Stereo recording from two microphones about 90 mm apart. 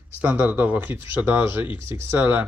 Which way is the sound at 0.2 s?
20° right (ahead or behind).